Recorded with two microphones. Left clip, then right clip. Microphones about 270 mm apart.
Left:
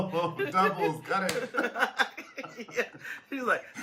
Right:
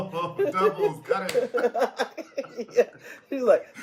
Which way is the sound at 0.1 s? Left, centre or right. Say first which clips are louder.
Right 5 dB; centre.